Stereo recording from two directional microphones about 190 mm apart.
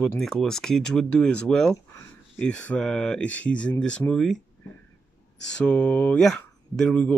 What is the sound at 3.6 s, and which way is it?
Speech, 5° left (ahead or behind).